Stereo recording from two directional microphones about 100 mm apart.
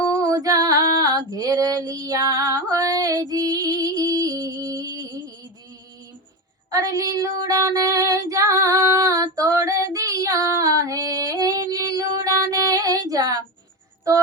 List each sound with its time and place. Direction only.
0.2 s female singing: 35° right (ahead or behind)
6.7 s female singing: 35° right (ahead or behind)